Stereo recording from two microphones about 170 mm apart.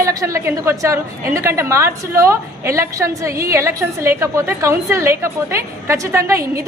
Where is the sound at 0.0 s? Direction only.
20° right (ahead or behind).